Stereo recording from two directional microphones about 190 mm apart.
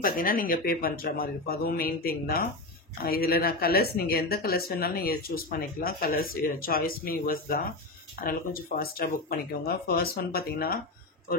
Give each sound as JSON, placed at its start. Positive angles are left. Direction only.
{"t": 0.0, "sound": "speech", "side_deg": 50}